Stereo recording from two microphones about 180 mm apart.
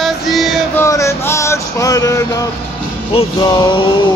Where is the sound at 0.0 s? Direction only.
Centre (ahead or behind).